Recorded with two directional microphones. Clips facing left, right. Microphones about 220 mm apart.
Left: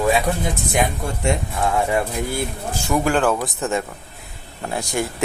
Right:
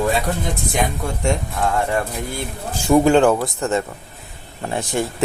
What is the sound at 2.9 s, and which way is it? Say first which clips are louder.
Speech: right 7 dB; 25° right (ahead or behind).